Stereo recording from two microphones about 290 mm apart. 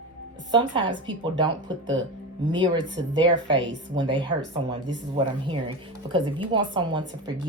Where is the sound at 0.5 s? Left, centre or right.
Centre.